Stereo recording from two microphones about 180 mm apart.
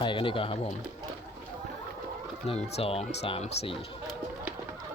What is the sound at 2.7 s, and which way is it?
Speech, 35° left (ahead or behind).